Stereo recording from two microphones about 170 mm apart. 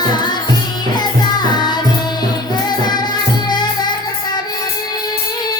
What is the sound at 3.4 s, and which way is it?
Music, 25° left (ahead or behind).